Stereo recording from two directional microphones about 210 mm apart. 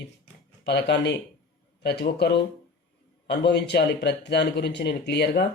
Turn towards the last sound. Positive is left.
turn(degrees=50)  # may be behind; listen again after turning